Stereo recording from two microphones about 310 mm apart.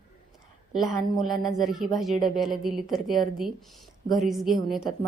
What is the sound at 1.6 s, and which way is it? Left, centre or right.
A woman's voice, centre.